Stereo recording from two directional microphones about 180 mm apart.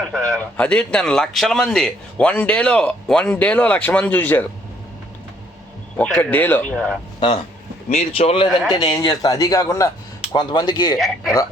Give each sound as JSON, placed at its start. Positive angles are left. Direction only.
{"t": 0.1, "sound": "speech", "side_deg": 5}
{"t": 6.0, "sound": "speech", "side_deg": 10}
{"t": 8.1, "sound": "a man's voice", "side_deg": 30}
{"t": 10.9, "sound": "speech", "side_deg": 0}